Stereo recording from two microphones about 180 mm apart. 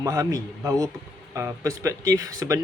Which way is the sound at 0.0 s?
20° right (ahead or behind).